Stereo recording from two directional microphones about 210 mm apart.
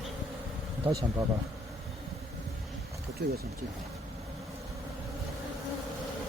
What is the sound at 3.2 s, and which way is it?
Speech, 50° right (ahead or behind).